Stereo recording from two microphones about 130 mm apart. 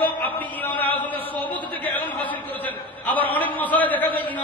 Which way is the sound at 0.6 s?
15° left (ahead or behind).